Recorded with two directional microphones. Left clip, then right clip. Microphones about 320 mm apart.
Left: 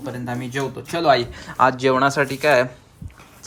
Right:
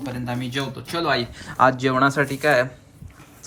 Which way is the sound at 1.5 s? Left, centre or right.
Centre.